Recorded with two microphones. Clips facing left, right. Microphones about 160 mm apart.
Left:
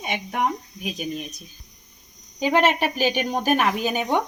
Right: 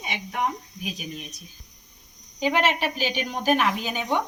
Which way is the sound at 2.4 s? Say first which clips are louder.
Left 4 dB; 50° left (ahead or behind).